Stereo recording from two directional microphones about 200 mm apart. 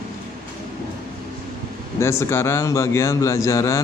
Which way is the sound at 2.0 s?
15° left (ahead or behind).